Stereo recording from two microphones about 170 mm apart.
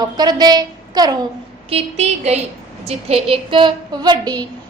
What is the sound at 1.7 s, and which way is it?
A woman's voice, 40° right (ahead or behind).